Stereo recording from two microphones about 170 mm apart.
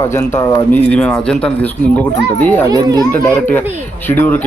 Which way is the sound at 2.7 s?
25° right (ahead or behind).